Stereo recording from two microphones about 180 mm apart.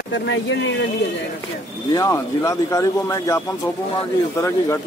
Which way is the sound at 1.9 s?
20° left (ahead or behind).